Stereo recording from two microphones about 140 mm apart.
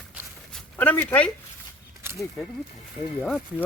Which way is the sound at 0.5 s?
10° left (ahead or behind).